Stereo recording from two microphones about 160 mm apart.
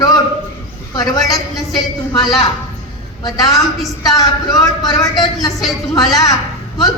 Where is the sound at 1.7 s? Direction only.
Centre (ahead or behind).